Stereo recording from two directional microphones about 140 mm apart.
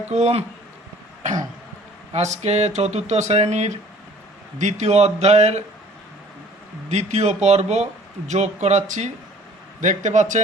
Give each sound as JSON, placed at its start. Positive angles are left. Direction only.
{"t": 0.1, "sound": "speech", "side_deg": -50}
{"t": 2.1, "sound": "speech", "side_deg": -50}
{"t": 6.9, "sound": "speech", "side_deg": -50}